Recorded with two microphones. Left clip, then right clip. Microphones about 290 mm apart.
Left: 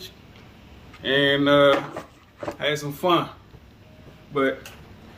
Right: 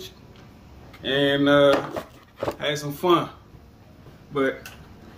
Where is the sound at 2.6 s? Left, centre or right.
Centre.